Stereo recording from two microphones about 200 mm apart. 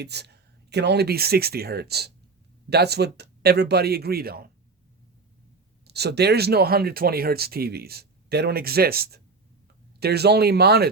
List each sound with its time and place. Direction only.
0.0 s speech: 55° right (ahead or behind)
5.8 s speech: 55° right (ahead or behind)